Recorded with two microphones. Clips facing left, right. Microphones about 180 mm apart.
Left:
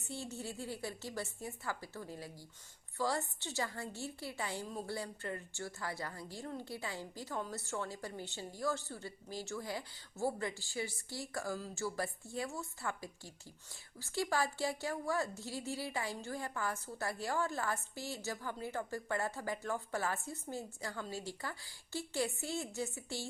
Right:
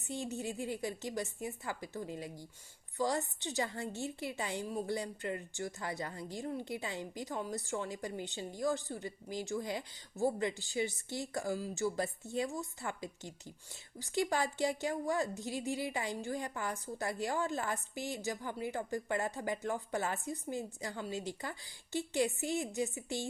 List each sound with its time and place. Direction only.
0.0 s a woman's voice: 15° right (ahead or behind)